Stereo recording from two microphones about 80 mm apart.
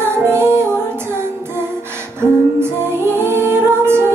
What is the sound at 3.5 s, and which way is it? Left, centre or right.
Music, right.